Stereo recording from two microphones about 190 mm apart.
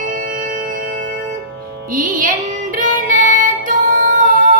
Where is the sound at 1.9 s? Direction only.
45° right (ahead or behind).